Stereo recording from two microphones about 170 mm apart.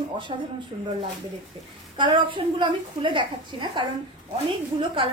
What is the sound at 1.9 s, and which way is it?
A woman's voice, 30° right (ahead or behind).